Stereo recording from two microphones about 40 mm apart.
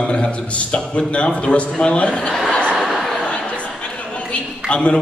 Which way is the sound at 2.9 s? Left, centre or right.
Centre.